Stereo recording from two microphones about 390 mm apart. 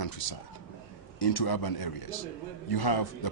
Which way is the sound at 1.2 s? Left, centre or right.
Left.